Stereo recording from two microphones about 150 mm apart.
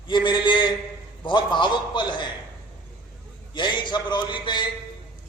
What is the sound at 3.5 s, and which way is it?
A man's voice, 30° left (ahead or behind).